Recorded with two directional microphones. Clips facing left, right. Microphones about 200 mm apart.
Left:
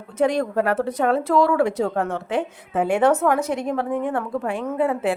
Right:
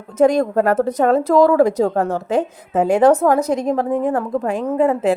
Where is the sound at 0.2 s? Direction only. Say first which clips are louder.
Right 6 dB; 45° right (ahead or behind).